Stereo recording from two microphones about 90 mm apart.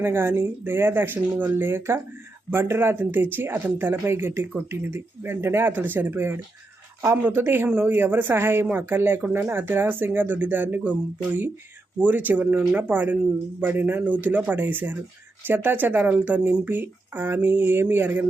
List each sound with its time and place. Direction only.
0.0 s speech: 25° right (ahead or behind)